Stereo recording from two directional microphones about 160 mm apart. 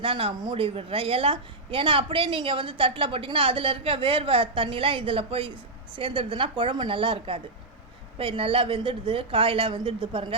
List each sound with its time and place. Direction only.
0.0 s a woman's voice: 35° right (ahead or behind)